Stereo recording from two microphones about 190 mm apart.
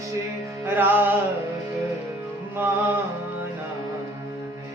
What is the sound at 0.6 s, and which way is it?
Music, 10° right (ahead or behind).